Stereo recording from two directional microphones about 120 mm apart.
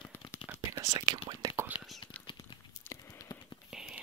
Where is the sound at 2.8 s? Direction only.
25° left (ahead or behind).